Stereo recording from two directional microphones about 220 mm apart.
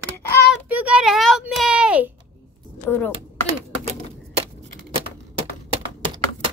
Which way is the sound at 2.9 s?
5° left (ahead or behind).